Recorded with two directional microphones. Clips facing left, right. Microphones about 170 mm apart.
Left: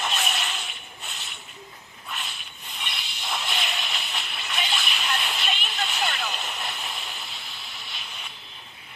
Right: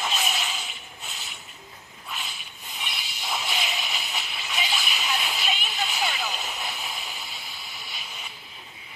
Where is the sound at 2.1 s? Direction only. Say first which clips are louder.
Left 1 dB; 5° right (ahead or behind).